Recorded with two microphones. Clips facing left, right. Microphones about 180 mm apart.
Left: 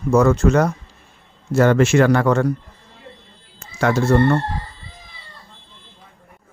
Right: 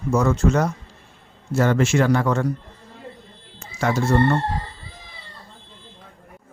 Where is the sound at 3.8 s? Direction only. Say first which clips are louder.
Left 3 dB; 70° left (ahead or behind).